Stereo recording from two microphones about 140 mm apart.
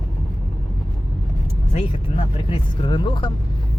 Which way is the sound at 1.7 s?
45° left (ahead or behind).